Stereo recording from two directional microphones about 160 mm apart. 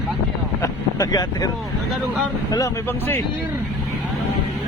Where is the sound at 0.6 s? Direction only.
20° left (ahead or behind).